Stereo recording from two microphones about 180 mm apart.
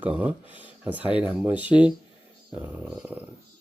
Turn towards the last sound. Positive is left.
turn(degrees=-10)  # may be behind; listen again after turning